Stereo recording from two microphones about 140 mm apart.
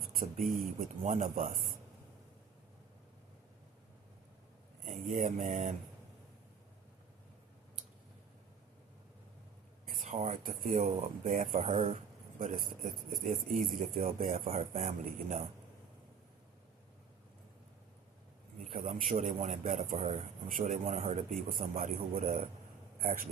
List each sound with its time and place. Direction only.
0.2 s speech: 80° right
0.6 s speech: 65° right (ahead or behind)
4.9 s speech: 65° right (ahead or behind)
9.8 s speech: 70° right (ahead or behind); by 11.9 s 45° right (ahead or behind)
12.4 s speech: 70° right (ahead or behind)
14.6 s speech: 45° right (ahead or behind)
15.0 s speech: 65° right (ahead or behind)
18.7 s speech: 60° right (ahead or behind)
20.6 s speech: 55° right (ahead or behind)
21.5 s speech: 75° right (ahead or behind)
22.2 s speech: 60° right (ahead or behind)
23.0 s a man's voice: 85° right